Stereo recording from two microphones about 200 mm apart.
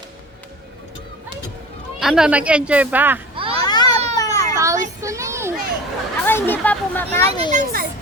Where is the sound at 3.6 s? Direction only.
20° left (ahead or behind).